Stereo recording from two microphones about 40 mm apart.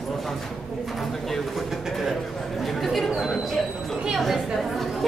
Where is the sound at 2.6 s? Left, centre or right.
Centre.